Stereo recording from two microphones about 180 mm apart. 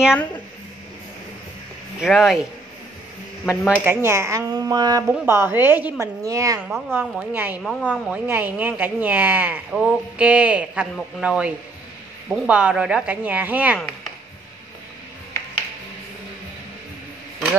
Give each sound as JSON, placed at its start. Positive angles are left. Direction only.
{"t": 2.0, "sound": "speech", "side_deg": 0}
{"t": 3.4, "sound": "speech", "side_deg": -5}